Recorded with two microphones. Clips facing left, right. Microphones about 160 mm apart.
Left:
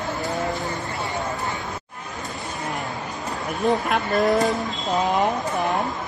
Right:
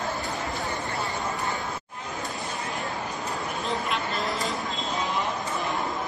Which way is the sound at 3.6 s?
55° left (ahead or behind).